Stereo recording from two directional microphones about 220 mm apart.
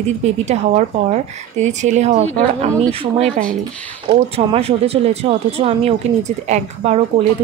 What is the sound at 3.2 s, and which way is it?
Speech, 5° left (ahead or behind).